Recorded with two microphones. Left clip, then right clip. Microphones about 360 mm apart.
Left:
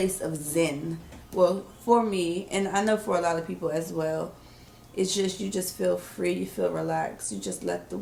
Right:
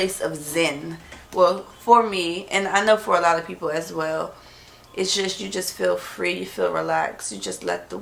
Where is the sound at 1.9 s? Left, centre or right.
Centre.